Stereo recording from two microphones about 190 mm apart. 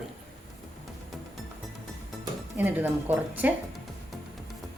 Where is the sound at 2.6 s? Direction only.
10° right (ahead or behind).